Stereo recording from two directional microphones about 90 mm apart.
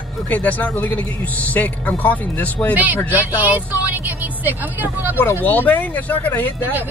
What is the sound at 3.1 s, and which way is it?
A woman's voice, 20° right (ahead or behind).